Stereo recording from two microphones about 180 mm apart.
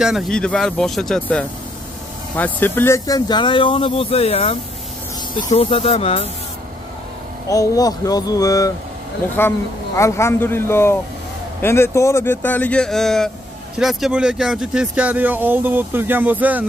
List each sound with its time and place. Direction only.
0.0 s speech: centre (ahead or behind); by 6.2 s 35° left (ahead or behind)
7.4 s speech: 20° left (ahead or behind); by 16.6 s 10° right (ahead or behind)